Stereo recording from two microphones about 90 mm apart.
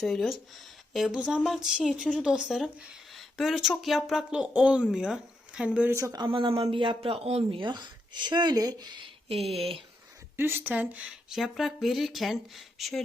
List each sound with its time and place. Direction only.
0.0 s speech: 5° left (ahead or behind)
1.1 s speech: 15° right (ahead or behind)
5.9 s speech: 30° right (ahead or behind)
6.1 s speech: 65° right (ahead or behind); by 8.9 s 45° right (ahead or behind)
10.3 s speech: 25° right (ahead or behind)
11.3 s speech: centre (ahead or behind)